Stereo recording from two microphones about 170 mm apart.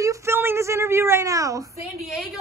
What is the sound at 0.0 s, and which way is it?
A woman's voice, 15° right (ahead or behind).